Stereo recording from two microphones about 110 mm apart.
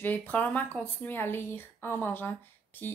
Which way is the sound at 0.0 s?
15° left (ahead or behind).